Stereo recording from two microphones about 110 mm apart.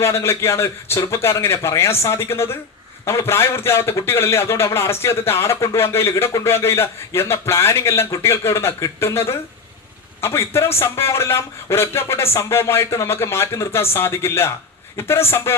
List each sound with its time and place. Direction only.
0.0 s a man's voice: 25° left (ahead or behind)